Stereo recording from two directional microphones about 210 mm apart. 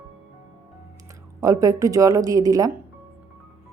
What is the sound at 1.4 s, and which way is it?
A woman's voice, 15° right (ahead or behind).